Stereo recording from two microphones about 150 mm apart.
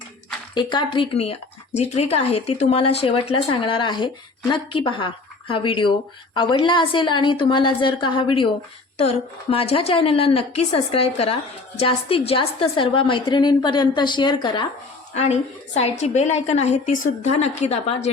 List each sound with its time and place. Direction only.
0.5 s speech: 30° left (ahead or behind)
15.1 s a woman's voice: 45° left (ahead or behind)